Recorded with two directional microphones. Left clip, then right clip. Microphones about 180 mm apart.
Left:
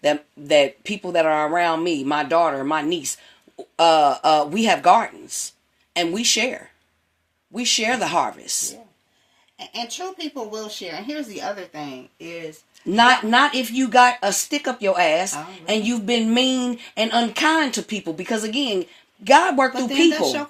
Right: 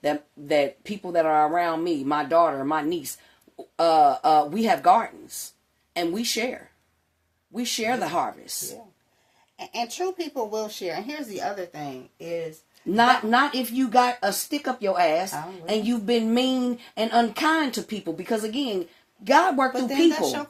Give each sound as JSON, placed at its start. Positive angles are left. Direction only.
{"t": 0.0, "sound": "speech", "side_deg": 30}
{"t": 10.5, "sound": "speech", "side_deg": -35}
{"t": 12.9, "sound": "speech", "side_deg": 30}